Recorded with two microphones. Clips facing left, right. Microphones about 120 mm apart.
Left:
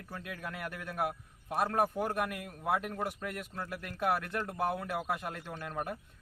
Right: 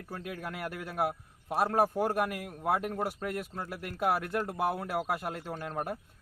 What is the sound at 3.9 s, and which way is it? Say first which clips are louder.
Speech: right 3 dB; 10° right (ahead or behind).